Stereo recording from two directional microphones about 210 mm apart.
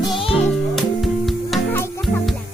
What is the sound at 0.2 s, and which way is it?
Music, 25° left (ahead or behind).